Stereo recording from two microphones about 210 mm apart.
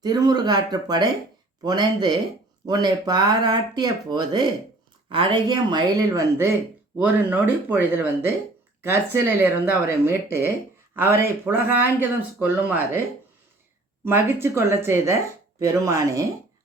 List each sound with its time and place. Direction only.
0.0 s speech: 20° right (ahead or behind)
7.0 s speech: 5° right (ahead or behind)
14.0 s speech: 10° right (ahead or behind)